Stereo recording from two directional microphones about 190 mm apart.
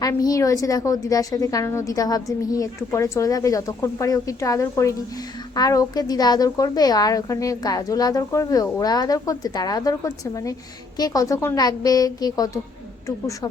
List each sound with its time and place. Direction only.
0.0 s a woman's voice: 20° left (ahead or behind)